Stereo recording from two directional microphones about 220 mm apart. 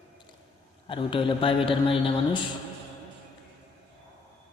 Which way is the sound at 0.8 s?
25° left (ahead or behind).